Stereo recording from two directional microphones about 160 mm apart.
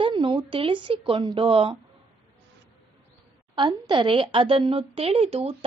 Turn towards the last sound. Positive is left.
turn(degrees=-40)  # may be behind; listen again after turning